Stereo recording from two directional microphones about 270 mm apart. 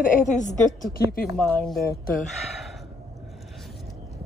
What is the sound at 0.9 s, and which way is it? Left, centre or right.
Speech, left.